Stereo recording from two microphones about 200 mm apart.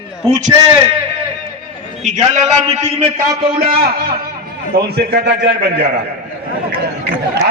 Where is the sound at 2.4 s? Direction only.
35° right (ahead or behind).